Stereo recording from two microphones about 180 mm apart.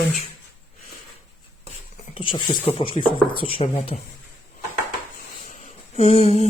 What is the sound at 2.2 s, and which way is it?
Speech, 30° left (ahead or behind).